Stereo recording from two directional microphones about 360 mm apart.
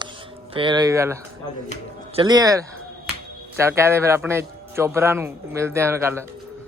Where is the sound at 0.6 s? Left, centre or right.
Centre.